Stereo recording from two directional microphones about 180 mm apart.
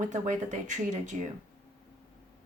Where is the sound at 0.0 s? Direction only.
40° right (ahead or behind).